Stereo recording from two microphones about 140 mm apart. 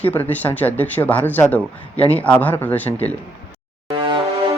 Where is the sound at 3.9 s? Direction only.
35° right (ahead or behind).